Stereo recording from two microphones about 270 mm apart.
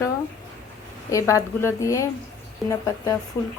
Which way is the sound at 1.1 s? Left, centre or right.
Centre.